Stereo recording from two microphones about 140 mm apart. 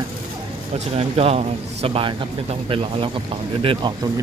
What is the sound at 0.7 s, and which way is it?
A man's voice, 45° right (ahead or behind).